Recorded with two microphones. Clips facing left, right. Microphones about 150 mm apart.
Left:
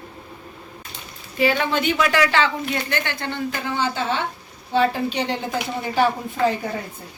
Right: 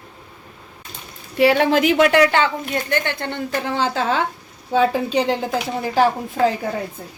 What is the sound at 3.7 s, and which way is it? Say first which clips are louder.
Speech: right 3 dB; 90° right.